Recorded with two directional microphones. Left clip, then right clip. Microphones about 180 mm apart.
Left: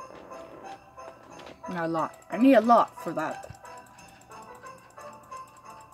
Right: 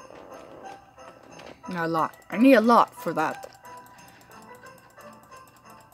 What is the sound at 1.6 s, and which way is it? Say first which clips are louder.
Speech: right 3 dB; 25° right (ahead or behind).